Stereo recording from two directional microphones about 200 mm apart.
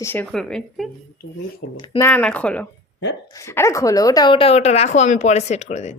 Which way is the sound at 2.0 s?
5° left (ahead or behind).